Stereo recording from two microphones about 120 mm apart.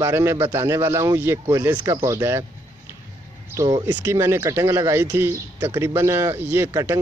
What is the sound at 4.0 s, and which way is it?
Speech, 20° right (ahead or behind).